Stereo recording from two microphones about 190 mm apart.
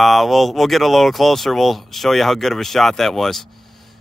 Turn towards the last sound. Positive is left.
turn(degrees=0)  # may be behind; listen again after turning